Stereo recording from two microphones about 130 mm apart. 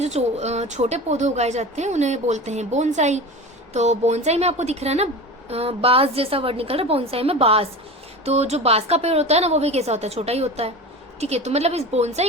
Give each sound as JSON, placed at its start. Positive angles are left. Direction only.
{"t": 0.0, "sound": "a woman's voice", "side_deg": -60}